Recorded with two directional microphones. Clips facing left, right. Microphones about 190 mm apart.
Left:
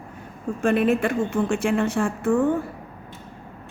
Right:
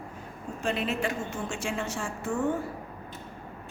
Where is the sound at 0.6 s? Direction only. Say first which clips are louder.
Left 9 dB; 55° left (ahead or behind).